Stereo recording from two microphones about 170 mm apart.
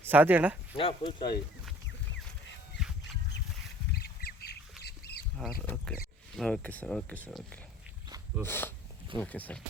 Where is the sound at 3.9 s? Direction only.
65° left (ahead or behind).